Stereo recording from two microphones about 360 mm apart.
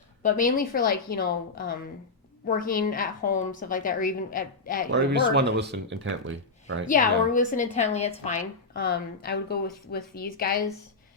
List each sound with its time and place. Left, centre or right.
0.2 s a woman's voice: left
4.9 s speech: right
6.8 s a woman's voice: left